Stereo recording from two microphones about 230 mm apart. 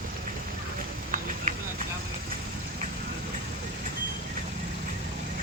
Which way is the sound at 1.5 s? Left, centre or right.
Right.